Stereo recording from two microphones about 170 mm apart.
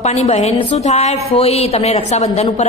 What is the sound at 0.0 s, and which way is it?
A woman's voice, 40° left (ahead or behind).